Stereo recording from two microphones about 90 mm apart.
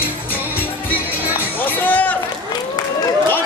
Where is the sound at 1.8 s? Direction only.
20° left (ahead or behind).